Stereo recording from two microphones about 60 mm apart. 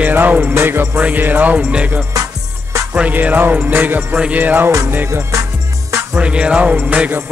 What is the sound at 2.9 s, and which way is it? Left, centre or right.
Music, right.